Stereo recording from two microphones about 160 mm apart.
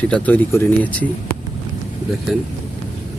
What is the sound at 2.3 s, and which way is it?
Speech, centre (ahead or behind).